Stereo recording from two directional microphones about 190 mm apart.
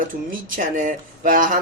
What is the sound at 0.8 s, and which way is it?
Speech, 45° right (ahead or behind).